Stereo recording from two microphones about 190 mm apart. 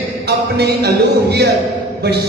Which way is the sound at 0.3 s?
60° right (ahead or behind).